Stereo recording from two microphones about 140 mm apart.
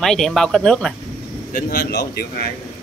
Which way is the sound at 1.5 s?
90° left.